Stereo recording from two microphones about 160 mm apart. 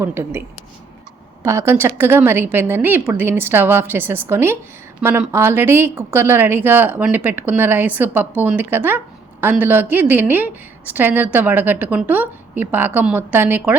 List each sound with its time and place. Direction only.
0.0 s a woman's voice: 15° right (ahead or behind)